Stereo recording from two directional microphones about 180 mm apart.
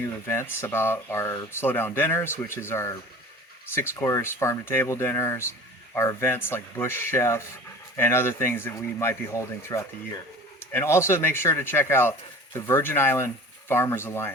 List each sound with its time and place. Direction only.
0.3 s speech: 15° left (ahead or behind)